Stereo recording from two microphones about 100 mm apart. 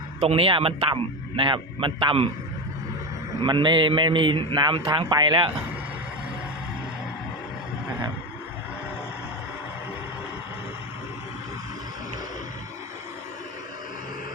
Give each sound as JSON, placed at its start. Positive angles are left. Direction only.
{"t": 0.2, "sound": "a man's voice", "side_deg": -70}
{"t": 3.4, "sound": "a man's voice", "side_deg": -50}